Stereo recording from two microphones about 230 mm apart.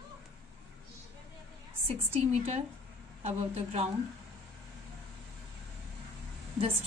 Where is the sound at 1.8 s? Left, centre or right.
Right.